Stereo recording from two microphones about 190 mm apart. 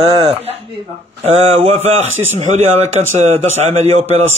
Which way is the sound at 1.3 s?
30° right (ahead or behind).